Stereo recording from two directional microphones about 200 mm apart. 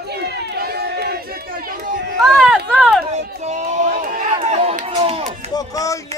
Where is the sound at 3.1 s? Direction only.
35° right (ahead or behind).